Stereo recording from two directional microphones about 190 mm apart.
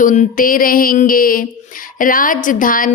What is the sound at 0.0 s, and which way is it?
A woman's voice, 45° left (ahead or behind).